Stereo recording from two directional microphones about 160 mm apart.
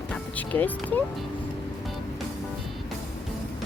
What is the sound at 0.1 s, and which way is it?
Speech, 10° left (ahead or behind).